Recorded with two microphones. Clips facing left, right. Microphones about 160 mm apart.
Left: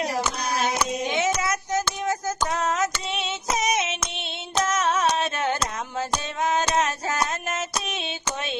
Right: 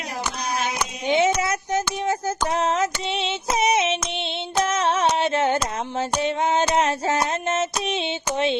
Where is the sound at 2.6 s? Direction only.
30° right (ahead or behind).